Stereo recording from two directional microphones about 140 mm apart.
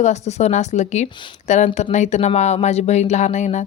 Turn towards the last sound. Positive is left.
turn(degrees=55)  # may be behind; listen again after turning